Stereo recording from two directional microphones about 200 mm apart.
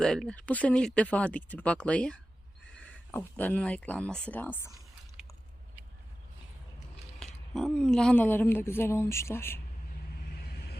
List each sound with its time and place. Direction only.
0.0 s speech: 5° left (ahead or behind)
7.2 s speech: centre (ahead or behind)
10.3 s vehicle: 50° left (ahead or behind)